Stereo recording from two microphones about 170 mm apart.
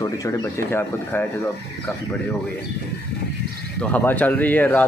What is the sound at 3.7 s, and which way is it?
A man's voice, 10° left (ahead or behind).